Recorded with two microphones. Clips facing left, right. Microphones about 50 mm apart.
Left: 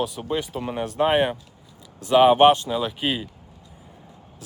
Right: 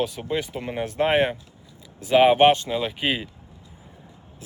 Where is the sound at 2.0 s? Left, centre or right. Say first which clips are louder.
Left 1 dB; centre.